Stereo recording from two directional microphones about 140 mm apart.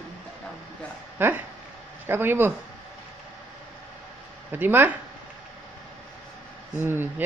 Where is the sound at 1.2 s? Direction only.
15° right (ahead or behind).